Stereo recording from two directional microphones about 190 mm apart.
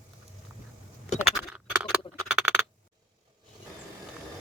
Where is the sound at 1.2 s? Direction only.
5° right (ahead or behind).